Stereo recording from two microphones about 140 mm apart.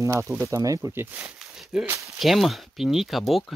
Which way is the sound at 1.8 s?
20° right (ahead or behind).